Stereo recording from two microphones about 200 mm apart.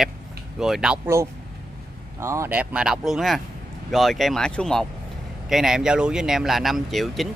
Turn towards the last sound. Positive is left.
turn(degrees=0)  # may be behind; listen again after turning